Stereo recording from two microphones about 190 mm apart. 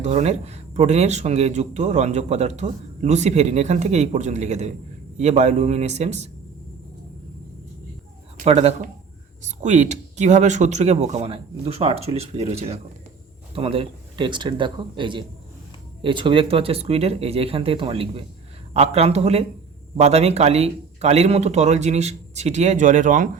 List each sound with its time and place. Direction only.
0.0 s speech: 35° right (ahead or behind)
8.4 s speech: 35° right (ahead or behind)